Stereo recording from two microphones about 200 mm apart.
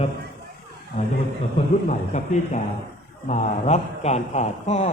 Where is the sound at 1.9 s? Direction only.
35° left (ahead or behind).